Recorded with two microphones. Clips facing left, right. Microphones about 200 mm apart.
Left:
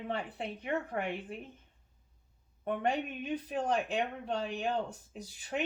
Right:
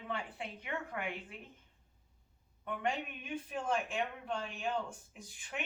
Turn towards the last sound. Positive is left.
turn(degrees=35)  # may be behind; listen again after turning